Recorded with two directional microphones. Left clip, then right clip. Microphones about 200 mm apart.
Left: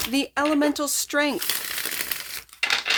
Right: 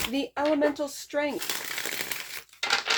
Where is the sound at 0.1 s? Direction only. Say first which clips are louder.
Left 5 dB; 35° left (ahead or behind).